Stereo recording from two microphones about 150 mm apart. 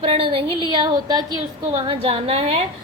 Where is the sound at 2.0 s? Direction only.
40° right (ahead or behind).